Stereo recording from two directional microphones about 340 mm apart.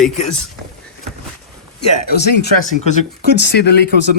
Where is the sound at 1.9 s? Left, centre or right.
Left.